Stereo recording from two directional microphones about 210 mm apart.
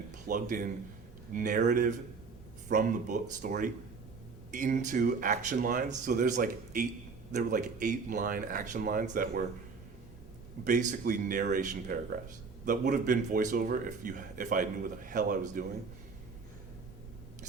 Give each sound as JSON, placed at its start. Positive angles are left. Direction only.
{"t": 0.3, "sound": "speech", "side_deg": -40}
{"t": 10.6, "sound": "speech", "side_deg": -35}